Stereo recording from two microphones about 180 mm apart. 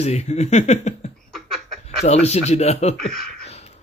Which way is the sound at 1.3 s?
Centre (ahead or behind).